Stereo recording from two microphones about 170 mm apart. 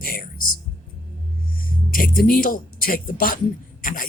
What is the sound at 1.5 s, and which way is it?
Speech, 60° left (ahead or behind).